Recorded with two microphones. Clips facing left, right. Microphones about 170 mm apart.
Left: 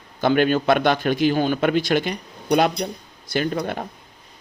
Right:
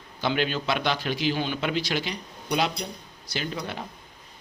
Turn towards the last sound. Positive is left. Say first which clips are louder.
# left 9 dB
turn(degrees=50)  # may be behind; listen again after turning